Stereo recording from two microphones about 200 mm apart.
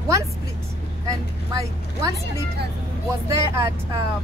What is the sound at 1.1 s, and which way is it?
Speech, 15° right (ahead or behind).